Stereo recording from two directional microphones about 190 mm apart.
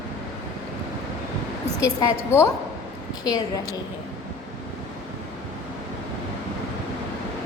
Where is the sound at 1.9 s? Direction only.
15° left (ahead or behind).